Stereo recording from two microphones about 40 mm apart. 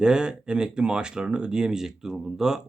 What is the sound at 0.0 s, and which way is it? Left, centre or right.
Speech, centre.